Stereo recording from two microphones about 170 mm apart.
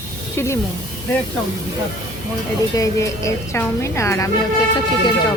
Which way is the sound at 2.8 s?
20° left (ahead or behind).